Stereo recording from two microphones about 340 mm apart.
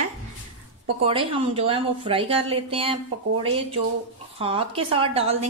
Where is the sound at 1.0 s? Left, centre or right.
Centre.